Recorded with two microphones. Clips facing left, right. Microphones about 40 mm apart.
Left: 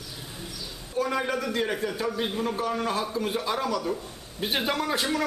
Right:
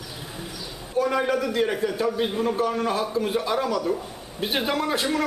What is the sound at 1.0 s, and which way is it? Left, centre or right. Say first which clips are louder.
A man's voice: right 4 dB; centre.